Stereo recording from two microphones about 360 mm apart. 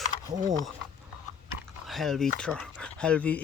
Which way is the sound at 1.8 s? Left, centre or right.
Centre.